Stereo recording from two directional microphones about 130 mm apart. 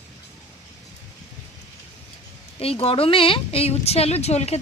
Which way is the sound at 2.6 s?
45° left (ahead or behind).